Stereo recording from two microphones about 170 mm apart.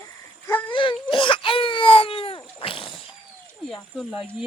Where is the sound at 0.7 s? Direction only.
30° left (ahead or behind).